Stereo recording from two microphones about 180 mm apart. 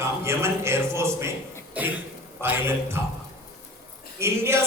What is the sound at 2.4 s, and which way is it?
Speech, 15° right (ahead or behind).